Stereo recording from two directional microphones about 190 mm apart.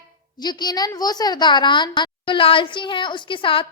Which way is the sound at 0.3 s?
20° left (ahead or behind).